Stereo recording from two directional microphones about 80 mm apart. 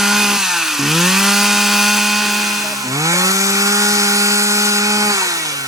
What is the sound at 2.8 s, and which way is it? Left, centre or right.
Chainsaw, right.